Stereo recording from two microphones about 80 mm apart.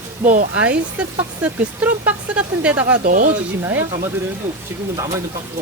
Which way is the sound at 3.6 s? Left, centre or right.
Right.